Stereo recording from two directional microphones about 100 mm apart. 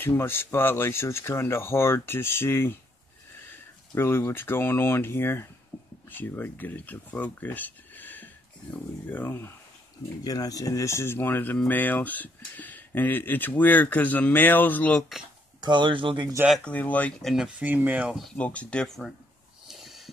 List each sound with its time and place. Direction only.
0.0 s speech: 20° left (ahead or behind)
3.9 s speech: 25° left (ahead or behind)
10.2 s speech: 40° left (ahead or behind); by 15.0 s 15° left (ahead or behind)
15.6 s speech: 50° right (ahead or behind)
16.6 s speech: 15° left (ahead or behind)
17.2 s speech: centre (ahead or behind)
17.6 s speech: 15° right (ahead or behind)
18.3 s speech: 15° left (ahead or behind)
19.7 s wheeze: centre (ahead or behind)